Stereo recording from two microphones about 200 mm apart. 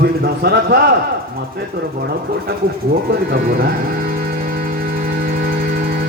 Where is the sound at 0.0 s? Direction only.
50° right (ahead or behind).